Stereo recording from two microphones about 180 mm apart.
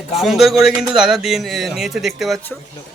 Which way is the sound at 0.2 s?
Centre (ahead or behind).